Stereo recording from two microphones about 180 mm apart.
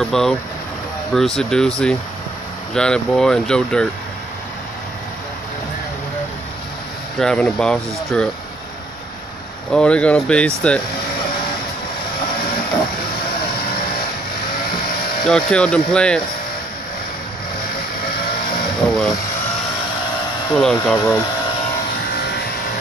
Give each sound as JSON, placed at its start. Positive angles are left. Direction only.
{"t": 0.0, "sound": "speech", "side_deg": 5}
{"t": 7.2, "sound": "speech", "side_deg": 5}
{"t": 9.7, "sound": "speech", "side_deg": 5}
{"t": 15.2, "sound": "speech", "side_deg": 5}
{"t": 20.5, "sound": "speech", "side_deg": 5}
{"t": 20.9, "sound": "speech", "side_deg": 20}